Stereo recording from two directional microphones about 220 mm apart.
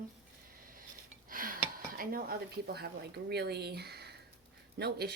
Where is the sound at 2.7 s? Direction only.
45° right (ahead or behind).